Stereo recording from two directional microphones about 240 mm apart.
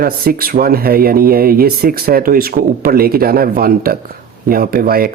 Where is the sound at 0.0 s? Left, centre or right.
Right.